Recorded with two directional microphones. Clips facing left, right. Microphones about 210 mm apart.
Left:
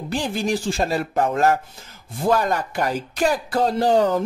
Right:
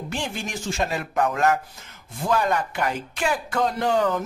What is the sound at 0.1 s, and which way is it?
Speech, 35° left (ahead or behind).